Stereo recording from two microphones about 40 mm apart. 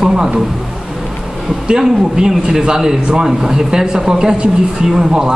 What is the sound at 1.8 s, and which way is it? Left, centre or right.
A man's voice, centre.